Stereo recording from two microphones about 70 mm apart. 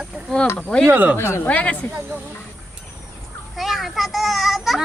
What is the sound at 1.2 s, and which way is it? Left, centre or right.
Speech, left.